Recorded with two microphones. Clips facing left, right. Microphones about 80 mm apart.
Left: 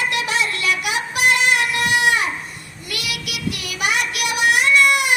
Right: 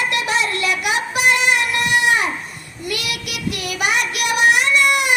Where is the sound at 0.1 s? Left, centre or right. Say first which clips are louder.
Right 2 dB; right.